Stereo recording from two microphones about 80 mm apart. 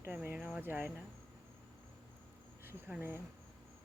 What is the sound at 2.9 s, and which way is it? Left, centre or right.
Speech, right.